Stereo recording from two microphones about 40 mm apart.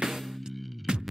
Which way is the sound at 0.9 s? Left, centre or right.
Centre.